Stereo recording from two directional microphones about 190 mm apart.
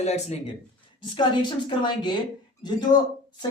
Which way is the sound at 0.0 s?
35° left (ahead or behind).